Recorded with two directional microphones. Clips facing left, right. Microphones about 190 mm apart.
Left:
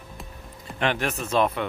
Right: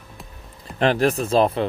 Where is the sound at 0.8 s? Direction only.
35° right (ahead or behind).